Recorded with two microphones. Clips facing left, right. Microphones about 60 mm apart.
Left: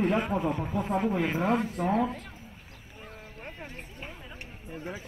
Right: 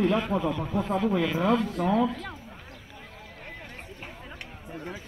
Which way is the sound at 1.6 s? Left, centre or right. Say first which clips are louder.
Right 3 dB; right.